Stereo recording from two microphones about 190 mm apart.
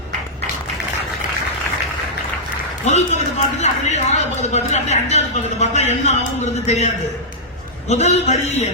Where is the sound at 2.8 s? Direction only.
35° left (ahead or behind).